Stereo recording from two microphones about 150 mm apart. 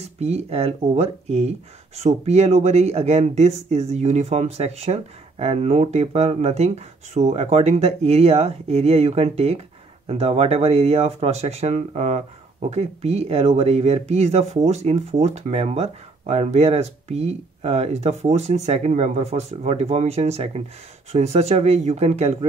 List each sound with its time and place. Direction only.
0.0 s speech: 45° right (ahead or behind)